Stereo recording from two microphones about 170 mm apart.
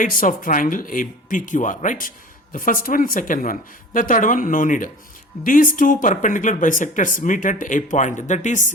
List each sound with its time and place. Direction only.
0.0 s speech: 55° left (ahead or behind)